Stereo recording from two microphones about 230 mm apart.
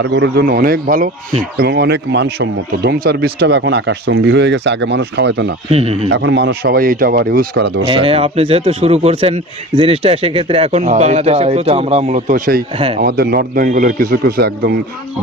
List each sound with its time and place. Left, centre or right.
0.0 s speech: right
5.7 s a man's voice: right
6.1 s speech: right
7.8 s a man's voice: right
12.7 s a man's voice: right
13.0 s speech: right